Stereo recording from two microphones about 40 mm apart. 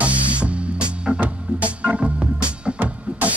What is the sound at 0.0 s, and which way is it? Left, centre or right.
Music, right.